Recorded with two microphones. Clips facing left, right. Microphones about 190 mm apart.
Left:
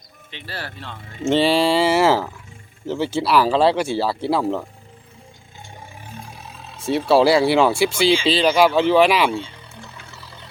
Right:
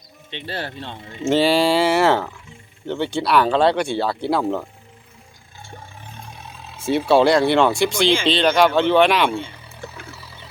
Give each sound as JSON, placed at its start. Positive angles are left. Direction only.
{"t": 0.3, "sound": "speech", "side_deg": -25}
{"t": 1.2, "sound": "speech", "side_deg": 0}
{"t": 6.1, "sound": "speech", "side_deg": 5}
{"t": 10.1, "sound": "a sound", "side_deg": -5}